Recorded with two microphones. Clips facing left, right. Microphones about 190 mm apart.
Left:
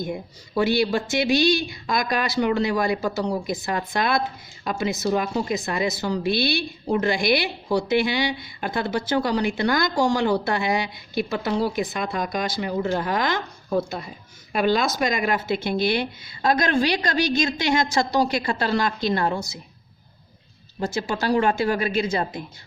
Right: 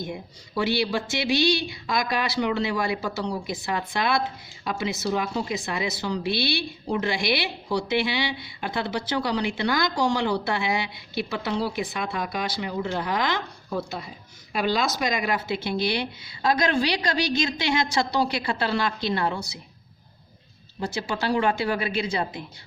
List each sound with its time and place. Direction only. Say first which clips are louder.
0.0 s a woman's voice: left 4 dB; 45° left (ahead or behind)
20.8 s a woman's voice: left 3 dB; 45° left (ahead or behind)